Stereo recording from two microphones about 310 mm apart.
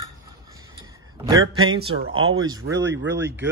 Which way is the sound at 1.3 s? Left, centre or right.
Right.